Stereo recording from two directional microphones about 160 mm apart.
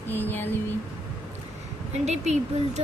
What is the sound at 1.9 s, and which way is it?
Speech, 45° right (ahead or behind).